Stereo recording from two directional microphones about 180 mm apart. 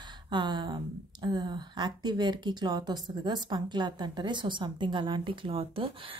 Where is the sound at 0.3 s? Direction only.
25° right (ahead or behind).